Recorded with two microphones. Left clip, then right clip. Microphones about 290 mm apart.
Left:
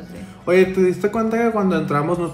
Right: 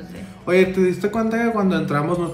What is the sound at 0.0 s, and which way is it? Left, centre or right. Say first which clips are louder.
A man's voice: left 3 dB; centre.